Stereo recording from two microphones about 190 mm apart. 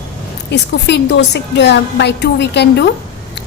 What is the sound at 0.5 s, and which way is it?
A woman's voice, 65° left (ahead or behind).